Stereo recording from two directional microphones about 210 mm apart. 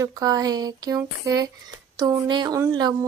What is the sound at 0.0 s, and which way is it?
Speech, 15° right (ahead or behind).